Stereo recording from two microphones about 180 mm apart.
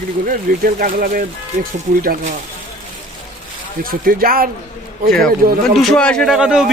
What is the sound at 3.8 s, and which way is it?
Speech, 55° right (ahead or behind).